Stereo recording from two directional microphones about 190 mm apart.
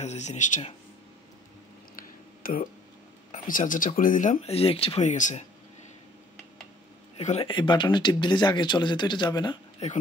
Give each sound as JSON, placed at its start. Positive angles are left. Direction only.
{"t": 0.0, "sound": "speech", "side_deg": 35}
{"t": 2.0, "sound": "a sound", "side_deg": 45}
{"t": 3.3, "sound": "speech", "side_deg": 45}
{"t": 7.2, "sound": "speech", "side_deg": 35}
{"t": 9.8, "sound": "speech", "side_deg": 35}